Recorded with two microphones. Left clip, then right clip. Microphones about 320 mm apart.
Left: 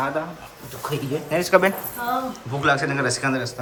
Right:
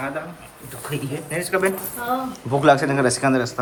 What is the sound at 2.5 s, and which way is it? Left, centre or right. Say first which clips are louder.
Speech: right 5 dB; centre.